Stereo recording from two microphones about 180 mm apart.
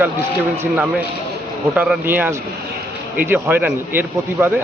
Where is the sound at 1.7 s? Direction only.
5° right (ahead or behind).